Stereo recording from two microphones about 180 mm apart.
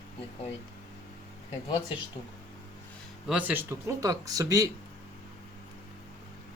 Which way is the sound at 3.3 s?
5° right (ahead or behind).